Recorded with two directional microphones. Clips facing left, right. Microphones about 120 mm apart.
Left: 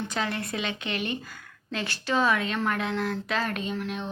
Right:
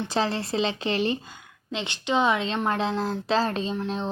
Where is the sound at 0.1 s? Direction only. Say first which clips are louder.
Right 5 dB; 30° right (ahead or behind).